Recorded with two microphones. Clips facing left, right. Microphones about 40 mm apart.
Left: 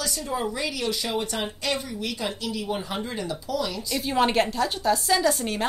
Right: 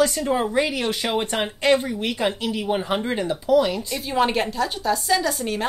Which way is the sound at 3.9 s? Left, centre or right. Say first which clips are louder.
Left 1 dB; centre.